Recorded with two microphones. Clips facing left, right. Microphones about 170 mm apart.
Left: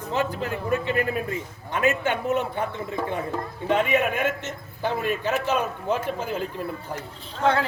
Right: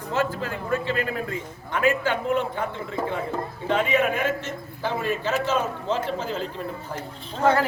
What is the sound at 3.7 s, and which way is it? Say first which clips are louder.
A man's voice: even; 20° left (ahead or behind).